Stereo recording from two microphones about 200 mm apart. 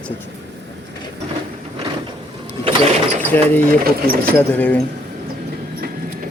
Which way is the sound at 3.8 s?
50° right (ahead or behind).